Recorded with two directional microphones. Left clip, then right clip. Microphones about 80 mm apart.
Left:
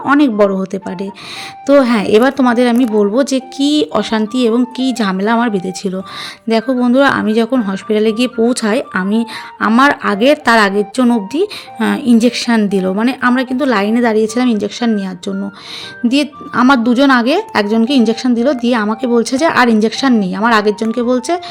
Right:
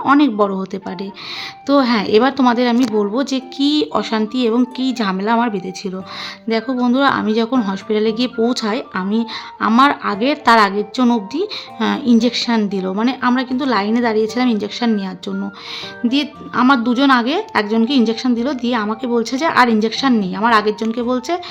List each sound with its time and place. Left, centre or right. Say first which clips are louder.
0.2 s a woman's voice: left 4 dB; left
6.7 s speech: left 3 dB; left
8.7 s a woman's voice: left 5 dB; left
13.1 s a woman's voice: left 1 dB; left
16.0 s a woman's voice: left 5 dB; left